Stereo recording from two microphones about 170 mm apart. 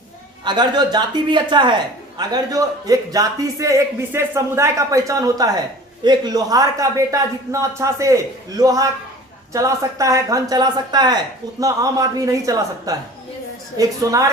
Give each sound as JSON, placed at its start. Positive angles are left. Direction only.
{"t": 0.4, "sound": "a woman's voice", "side_deg": -25}